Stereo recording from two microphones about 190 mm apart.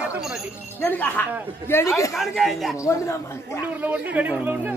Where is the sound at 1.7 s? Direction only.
10° left (ahead or behind).